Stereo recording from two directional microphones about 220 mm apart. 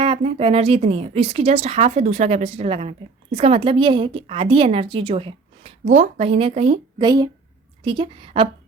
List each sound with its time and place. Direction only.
0.0 s a woman's voice: 25° right (ahead or behind)